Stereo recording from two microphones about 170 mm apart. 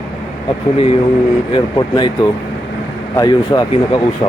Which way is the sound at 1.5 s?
30° left (ahead or behind).